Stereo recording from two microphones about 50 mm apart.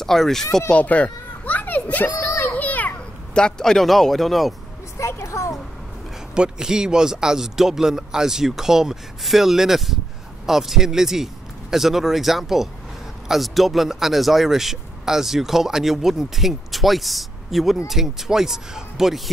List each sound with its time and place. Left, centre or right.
0.0 s speech: centre
0.7 s children playing: left
2.1 s a sound: left
3.3 s speech: centre
4.9 s a woman's voice: left
6.3 s speech: centre